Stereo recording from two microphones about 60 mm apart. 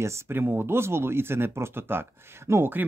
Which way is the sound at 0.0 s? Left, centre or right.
Right.